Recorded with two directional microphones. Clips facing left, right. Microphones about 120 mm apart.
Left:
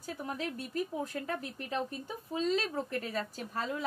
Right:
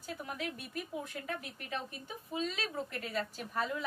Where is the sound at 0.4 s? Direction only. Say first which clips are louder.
Left 5 dB; 35° left (ahead or behind).